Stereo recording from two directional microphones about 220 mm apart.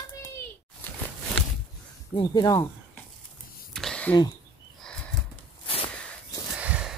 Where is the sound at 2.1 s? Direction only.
20° left (ahead or behind).